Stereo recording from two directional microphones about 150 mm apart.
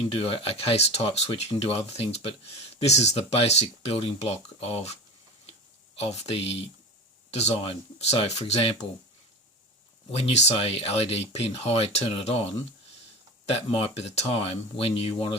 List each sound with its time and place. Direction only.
0.1 s speech: 40° left (ahead or behind)
6.0 s speech: 45° left (ahead or behind)
10.1 s speech: 45° left (ahead or behind)